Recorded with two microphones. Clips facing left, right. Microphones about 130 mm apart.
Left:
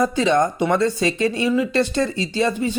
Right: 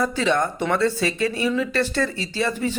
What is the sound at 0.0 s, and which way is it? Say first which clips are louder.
Speech: left 4 dB; 15° left (ahead or behind).